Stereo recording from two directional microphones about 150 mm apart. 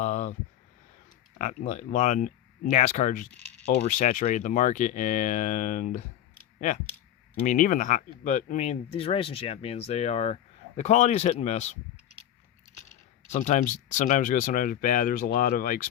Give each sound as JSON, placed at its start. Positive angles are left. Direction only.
{"t": 0.0, "sound": "a sound", "side_deg": 50}
{"t": 1.4, "sound": "speech", "side_deg": 55}
{"t": 7.4, "sound": "speech", "side_deg": 60}
{"t": 13.2, "sound": "speech", "side_deg": 50}